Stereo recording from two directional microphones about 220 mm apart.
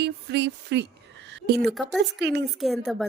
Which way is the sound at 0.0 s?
50° right (ahead or behind).